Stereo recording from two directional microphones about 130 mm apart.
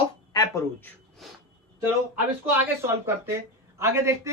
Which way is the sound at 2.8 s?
20° right (ahead or behind).